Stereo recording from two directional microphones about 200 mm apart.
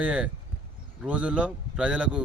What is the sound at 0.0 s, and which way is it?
Speech, 5° right (ahead or behind).